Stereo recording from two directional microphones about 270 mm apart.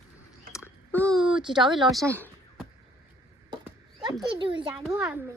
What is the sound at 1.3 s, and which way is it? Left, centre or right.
Speech, centre.